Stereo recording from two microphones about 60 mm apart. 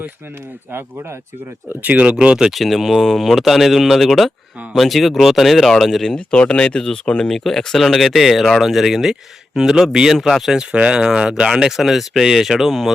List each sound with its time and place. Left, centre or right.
1.7 s speech: right
2.1 s speech: centre
2.5 s speech: centre
6.3 s speech: centre
10.6 s speech: centre